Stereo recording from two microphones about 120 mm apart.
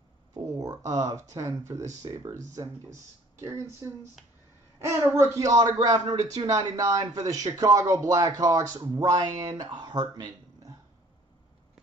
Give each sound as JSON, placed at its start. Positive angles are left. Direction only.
{"t": 0.3, "sound": "speech", "side_deg": -30}
{"t": 4.7, "sound": "speech", "side_deg": -25}